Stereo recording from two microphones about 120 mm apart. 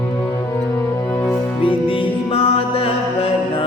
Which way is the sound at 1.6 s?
45° left (ahead or behind).